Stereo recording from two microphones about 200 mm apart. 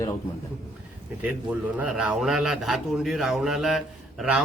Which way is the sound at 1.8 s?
5° right (ahead or behind).